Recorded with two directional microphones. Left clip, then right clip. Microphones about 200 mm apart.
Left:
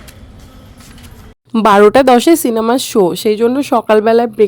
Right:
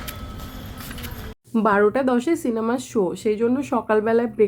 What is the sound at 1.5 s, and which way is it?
Speech, 60° left (ahead or behind).